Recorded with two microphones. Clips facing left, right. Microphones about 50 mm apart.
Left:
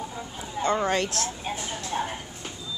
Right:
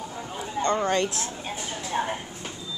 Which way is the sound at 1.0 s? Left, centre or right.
Centre.